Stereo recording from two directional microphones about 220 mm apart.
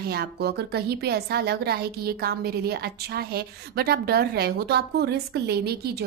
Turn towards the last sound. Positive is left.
turn(degrees=-45)  # may be behind; listen again after turning